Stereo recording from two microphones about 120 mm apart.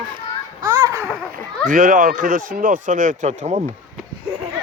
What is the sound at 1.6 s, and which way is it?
Speech, 90° right.